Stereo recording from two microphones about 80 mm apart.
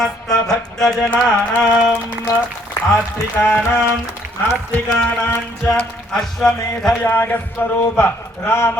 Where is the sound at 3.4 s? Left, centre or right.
Left.